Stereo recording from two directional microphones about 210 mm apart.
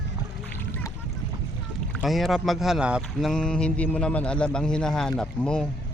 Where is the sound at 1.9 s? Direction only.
Centre (ahead or behind).